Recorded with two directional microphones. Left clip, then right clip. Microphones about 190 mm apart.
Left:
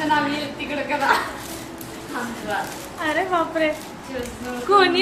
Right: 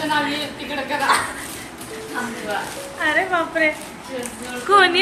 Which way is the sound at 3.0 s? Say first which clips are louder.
Right 2 dB; 5° left (ahead or behind).